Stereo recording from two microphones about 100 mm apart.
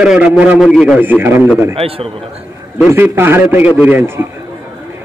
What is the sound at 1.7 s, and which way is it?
Speech, 70° right (ahead or behind).